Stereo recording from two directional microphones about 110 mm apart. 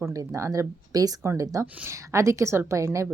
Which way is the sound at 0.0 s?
30° right (ahead or behind).